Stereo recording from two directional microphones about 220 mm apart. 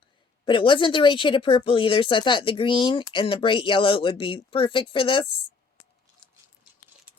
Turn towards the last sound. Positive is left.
turn(degrees=25)  # may be behind; listen again after turning